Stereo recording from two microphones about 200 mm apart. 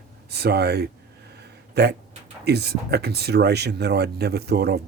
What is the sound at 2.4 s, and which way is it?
Speech, 55° right (ahead or behind).